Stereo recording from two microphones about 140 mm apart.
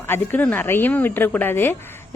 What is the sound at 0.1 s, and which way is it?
A woman's voice, 15° left (ahead or behind).